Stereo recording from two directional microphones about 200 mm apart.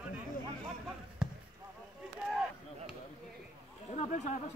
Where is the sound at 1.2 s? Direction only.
Centre (ahead or behind).